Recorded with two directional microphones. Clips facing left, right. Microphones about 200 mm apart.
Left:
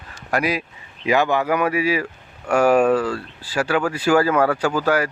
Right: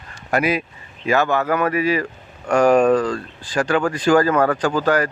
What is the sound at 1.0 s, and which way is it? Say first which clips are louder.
Speech: even; 15° left (ahead or behind).